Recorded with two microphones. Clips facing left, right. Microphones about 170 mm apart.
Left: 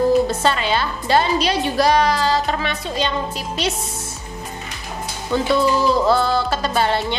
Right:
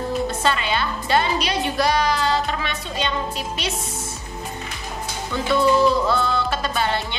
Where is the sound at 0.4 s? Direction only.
35° left (ahead or behind).